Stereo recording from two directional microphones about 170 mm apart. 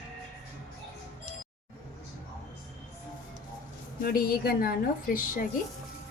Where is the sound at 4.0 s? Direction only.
60° left (ahead or behind).